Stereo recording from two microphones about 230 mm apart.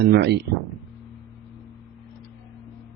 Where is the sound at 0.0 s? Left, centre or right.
Right.